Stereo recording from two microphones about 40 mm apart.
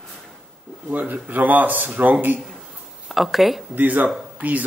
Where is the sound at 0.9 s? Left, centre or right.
Right.